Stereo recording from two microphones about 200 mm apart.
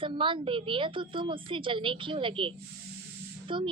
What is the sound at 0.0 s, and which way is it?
A woman's voice, 25° right (ahead or behind).